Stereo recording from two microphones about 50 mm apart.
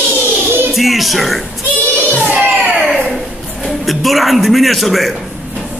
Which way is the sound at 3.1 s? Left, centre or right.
Centre.